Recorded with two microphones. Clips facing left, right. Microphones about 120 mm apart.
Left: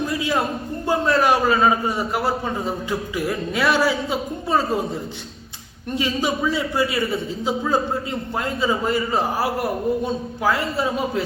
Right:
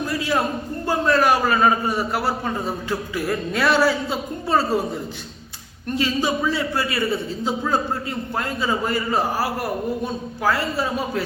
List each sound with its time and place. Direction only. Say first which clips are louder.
0.1 s a sound: even; 20° left (ahead or behind)
0.9 s a man's voice: even; 20° left (ahead or behind)
6.0 s a man's voice: even; 15° left (ahead or behind)